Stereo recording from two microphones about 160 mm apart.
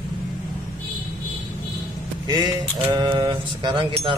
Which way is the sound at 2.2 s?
25° right (ahead or behind).